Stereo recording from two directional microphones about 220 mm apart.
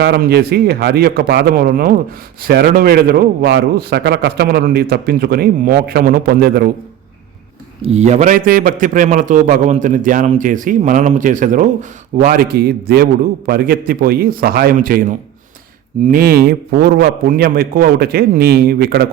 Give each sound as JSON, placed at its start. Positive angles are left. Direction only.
{"t": 0.0, "sound": "a man's voice", "side_deg": -45}
{"t": 7.9, "sound": "a man's voice", "side_deg": -30}
{"t": 16.0, "sound": "a man's voice", "side_deg": -40}